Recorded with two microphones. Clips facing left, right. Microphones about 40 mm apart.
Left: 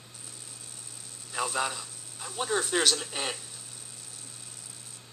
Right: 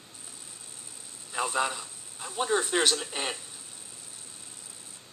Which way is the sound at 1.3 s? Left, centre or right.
Centre.